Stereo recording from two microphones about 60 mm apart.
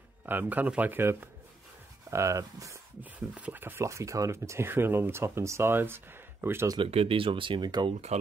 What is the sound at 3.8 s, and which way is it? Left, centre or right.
Speech, right.